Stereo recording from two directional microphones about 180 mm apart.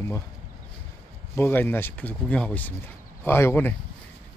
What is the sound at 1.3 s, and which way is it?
Speech, 10° left (ahead or behind).